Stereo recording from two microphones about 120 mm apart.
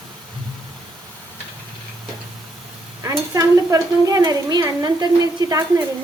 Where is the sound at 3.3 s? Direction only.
30° right (ahead or behind).